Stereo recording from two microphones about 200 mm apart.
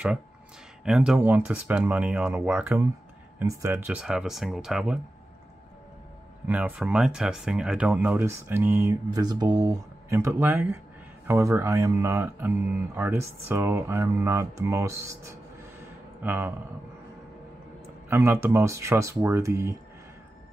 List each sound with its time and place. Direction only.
0.8 s speech: centre (ahead or behind)
6.4 s speech: 10° right (ahead or behind)
18.1 s speech: 10° right (ahead or behind)